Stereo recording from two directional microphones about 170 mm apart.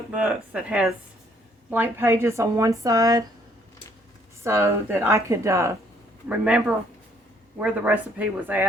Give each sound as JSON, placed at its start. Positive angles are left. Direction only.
{"t": 0.1, "sound": "speech", "side_deg": -5}
{"t": 4.4, "sound": "speech", "side_deg": -15}